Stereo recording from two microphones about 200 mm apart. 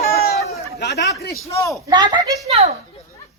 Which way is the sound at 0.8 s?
60° left (ahead or behind).